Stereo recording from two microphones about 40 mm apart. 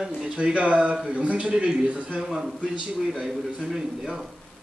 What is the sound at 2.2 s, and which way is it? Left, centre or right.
Speech, centre.